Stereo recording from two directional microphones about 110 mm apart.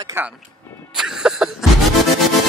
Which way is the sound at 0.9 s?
5° right (ahead or behind).